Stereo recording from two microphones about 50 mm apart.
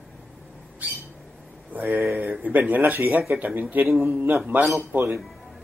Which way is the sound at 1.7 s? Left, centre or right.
Right.